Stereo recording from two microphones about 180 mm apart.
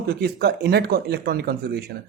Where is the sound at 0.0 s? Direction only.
60° right (ahead or behind).